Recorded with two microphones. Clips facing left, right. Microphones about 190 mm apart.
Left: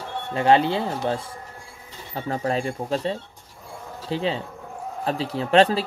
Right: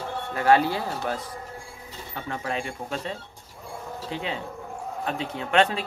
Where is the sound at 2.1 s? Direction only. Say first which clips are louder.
Left 6 dB; 35° left (ahead or behind).